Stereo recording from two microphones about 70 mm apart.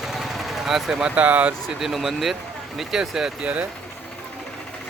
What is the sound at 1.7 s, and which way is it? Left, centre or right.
Speech, centre.